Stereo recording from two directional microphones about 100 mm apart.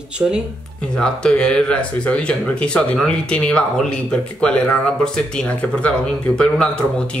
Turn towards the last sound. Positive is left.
turn(degrees=10)  # may be behind; listen again after turning